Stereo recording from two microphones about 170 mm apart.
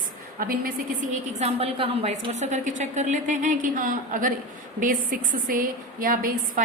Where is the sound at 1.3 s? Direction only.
40° right (ahead or behind).